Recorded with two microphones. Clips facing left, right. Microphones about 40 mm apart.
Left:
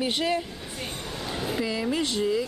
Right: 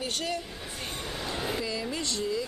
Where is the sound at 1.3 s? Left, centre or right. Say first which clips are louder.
Left 3 dB; centre.